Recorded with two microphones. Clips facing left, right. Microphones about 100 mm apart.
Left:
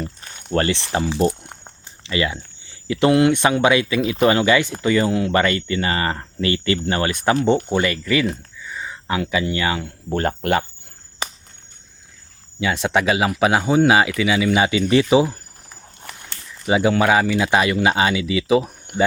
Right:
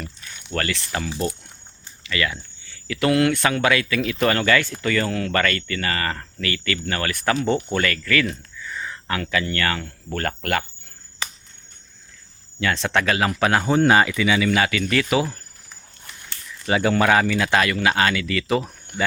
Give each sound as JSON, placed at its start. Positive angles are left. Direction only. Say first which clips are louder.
{"t": 0.0, "sound": "a sound", "louder": "left 6 dB", "side_deg": 40}
{"t": 0.5, "sound": "speech", "louder": "left 6 dB", "side_deg": 25}
{"t": 1.2, "sound": "a sound", "louder": "left 7 dB", "side_deg": 60}
{"t": 2.0, "sound": "speech", "louder": "left 3 dB", "side_deg": 25}
{"t": 12.5, "sound": "speech", "louder": "left 2 dB", "side_deg": 10}
{"t": 14.6, "sound": "speech", "louder": "left 5 dB", "side_deg": 20}
{"t": 16.6, "sound": "speech", "louder": "left 2 dB", "side_deg": 15}